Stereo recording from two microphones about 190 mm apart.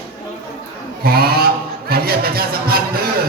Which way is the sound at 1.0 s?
55° right (ahead or behind).